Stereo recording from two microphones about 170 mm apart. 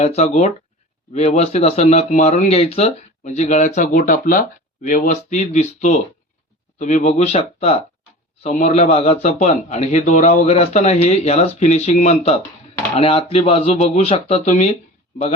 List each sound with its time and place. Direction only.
0.0 s speech: 40° left (ahead or behind)